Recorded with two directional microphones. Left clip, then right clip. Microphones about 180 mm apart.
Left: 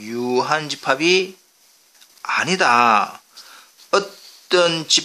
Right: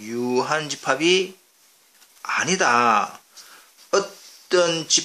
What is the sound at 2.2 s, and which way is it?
Speech, 25° left (ahead or behind).